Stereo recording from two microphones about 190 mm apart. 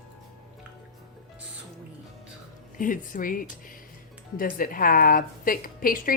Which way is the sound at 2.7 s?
45° left (ahead or behind).